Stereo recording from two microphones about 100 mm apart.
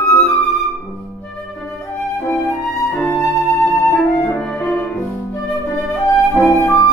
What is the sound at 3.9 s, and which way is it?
Music, centre (ahead or behind).